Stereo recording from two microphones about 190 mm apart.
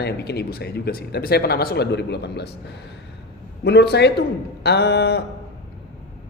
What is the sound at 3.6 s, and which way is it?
Speech, 60° left (ahead or behind).